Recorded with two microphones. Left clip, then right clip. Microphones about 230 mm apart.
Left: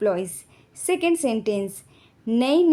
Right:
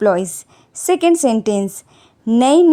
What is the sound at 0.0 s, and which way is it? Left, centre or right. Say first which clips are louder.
A woman's voice: right 8 dB; right.